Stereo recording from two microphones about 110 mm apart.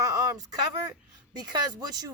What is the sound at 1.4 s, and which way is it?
Speech, 35° right (ahead or behind).